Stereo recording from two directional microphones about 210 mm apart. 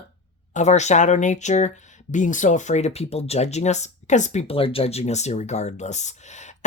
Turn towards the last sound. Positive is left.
turn(degrees=35)  # may be behind; listen again after turning